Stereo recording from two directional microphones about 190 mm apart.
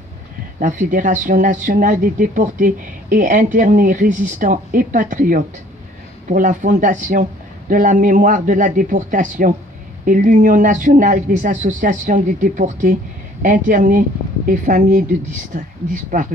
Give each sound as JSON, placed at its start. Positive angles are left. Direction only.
{"t": 0.6, "sound": "speech", "side_deg": -45}